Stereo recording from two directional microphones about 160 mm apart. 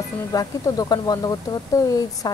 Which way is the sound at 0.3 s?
20° left (ahead or behind).